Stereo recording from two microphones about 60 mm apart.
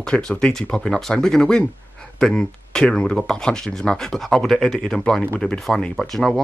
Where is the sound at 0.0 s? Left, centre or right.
Centre.